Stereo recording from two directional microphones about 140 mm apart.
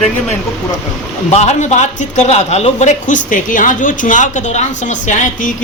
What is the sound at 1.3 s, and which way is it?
A man's voice, 50° left (ahead or behind).